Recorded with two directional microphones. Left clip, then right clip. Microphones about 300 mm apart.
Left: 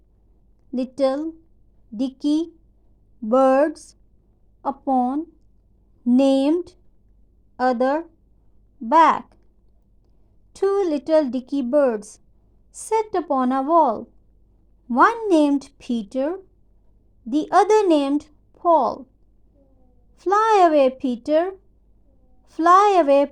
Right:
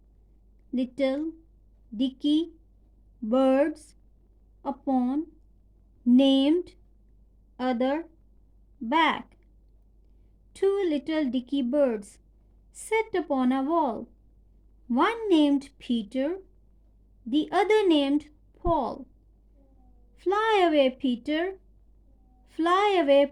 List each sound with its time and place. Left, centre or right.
0.7 s speech: centre
10.5 s speech: centre
20.1 s speech: centre